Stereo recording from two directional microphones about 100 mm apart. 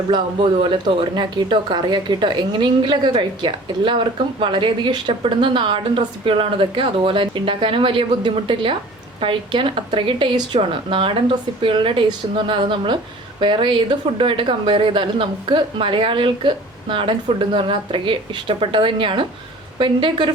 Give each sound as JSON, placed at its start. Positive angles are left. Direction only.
{"t": 0.6, "sound": "a woman's voice", "side_deg": -55}